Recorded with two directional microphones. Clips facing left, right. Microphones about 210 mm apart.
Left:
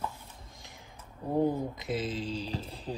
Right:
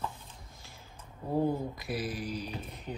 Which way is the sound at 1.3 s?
20° left (ahead or behind).